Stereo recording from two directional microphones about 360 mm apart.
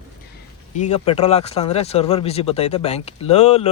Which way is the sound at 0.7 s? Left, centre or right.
Centre.